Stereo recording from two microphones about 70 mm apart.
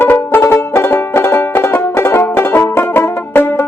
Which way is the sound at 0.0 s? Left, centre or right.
Left.